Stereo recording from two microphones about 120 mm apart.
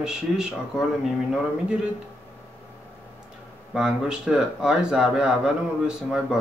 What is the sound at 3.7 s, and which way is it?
Speech, 5° right (ahead or behind).